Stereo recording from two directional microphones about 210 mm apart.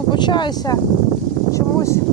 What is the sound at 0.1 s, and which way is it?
Speech, 20° left (ahead or behind).